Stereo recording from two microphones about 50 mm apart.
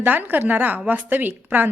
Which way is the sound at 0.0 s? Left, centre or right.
Right.